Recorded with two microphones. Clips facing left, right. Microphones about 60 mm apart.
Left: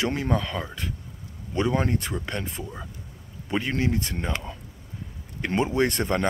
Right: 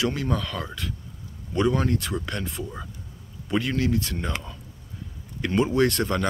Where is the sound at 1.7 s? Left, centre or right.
Left.